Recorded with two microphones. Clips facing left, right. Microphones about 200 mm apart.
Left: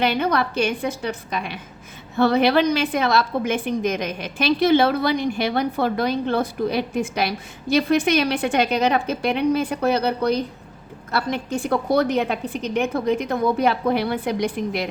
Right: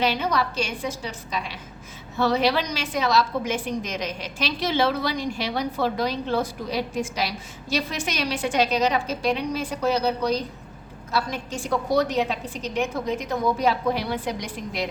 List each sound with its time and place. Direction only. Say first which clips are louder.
0.0 s a woman's voice: left 3 dB; 55° left (ahead or behind)